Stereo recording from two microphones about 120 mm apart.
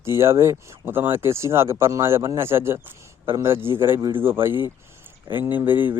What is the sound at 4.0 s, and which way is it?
Speech, 45° right (ahead or behind).